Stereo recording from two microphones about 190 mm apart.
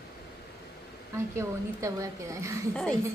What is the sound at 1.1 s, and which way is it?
A woman's voice, 15° right (ahead or behind).